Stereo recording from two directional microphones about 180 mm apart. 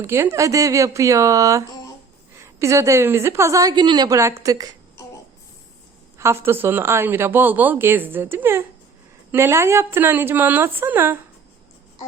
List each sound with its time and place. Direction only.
0.0 s speech: 15° right (ahead or behind)
6.1 s speech: 15° right (ahead or behind)